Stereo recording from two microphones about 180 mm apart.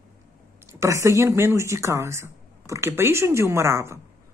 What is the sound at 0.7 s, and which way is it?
Speech, 15° right (ahead or behind).